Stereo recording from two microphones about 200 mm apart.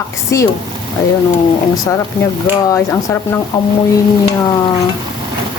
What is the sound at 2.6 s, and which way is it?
Speech, 15° left (ahead or behind).